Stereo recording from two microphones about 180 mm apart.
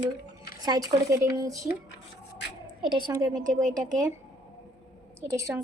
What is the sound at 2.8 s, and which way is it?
Speech, 25° right (ahead or behind).